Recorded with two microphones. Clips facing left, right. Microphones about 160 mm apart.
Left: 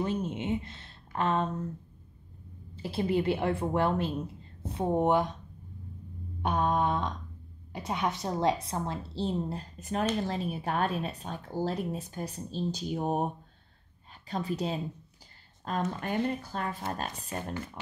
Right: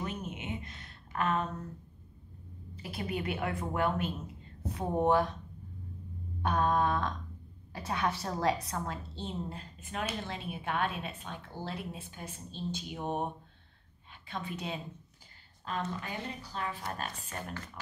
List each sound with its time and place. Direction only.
0.0 s a sound: 30° left (ahead or behind)
2.7 s a woman's voice: 30° left (ahead or behind)
6.4 s a sound: 20° left (ahead or behind)
7.7 s a woman's voice: 20° left (ahead or behind); by 14.8 s 35° left (ahead or behind)
15.6 s speech: 50° left (ahead or behind)
16.8 s speech: 35° left (ahead or behind)